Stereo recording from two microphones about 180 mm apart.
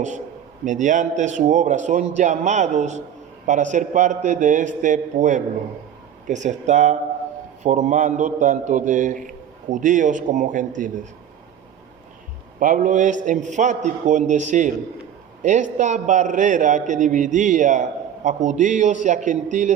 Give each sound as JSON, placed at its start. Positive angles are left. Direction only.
{"t": 0.6, "sound": "a man's voice", "side_deg": -45}
{"t": 12.5, "sound": "a man's voice", "side_deg": -45}